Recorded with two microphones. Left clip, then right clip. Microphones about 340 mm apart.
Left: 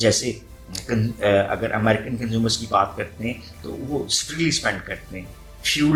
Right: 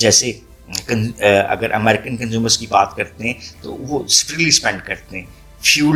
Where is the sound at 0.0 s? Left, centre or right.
Right.